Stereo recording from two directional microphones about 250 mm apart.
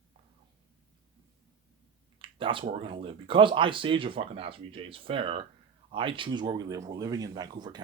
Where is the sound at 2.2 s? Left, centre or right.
Centre.